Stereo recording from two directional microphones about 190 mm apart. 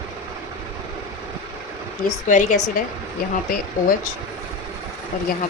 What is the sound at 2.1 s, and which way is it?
Speech, 40° left (ahead or behind).